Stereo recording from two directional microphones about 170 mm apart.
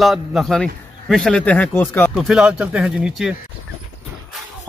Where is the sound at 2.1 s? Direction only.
5° right (ahead or behind).